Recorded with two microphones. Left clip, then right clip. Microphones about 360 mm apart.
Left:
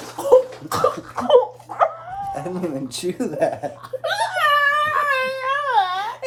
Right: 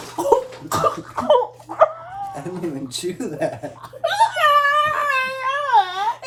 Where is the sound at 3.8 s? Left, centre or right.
Centre.